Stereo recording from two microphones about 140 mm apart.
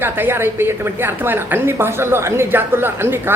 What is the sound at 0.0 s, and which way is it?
A man's voice, 15° right (ahead or behind).